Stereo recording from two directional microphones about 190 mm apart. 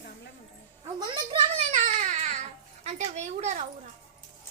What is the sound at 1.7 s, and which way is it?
Baby cry, 40° right (ahead or behind).